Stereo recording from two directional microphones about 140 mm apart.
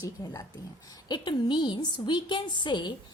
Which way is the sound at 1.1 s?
35° left (ahead or behind).